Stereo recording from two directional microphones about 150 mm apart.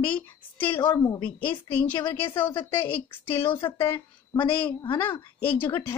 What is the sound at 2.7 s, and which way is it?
Speech, 15° left (ahead or behind).